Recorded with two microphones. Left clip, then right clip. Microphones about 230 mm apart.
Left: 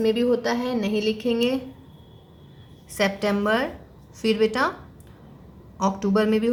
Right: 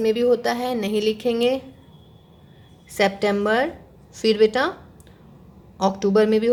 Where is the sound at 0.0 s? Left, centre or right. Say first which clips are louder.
Right 3 dB; right.